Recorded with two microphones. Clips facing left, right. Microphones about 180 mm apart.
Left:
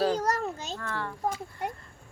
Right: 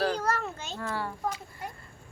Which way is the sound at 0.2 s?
40° left (ahead or behind).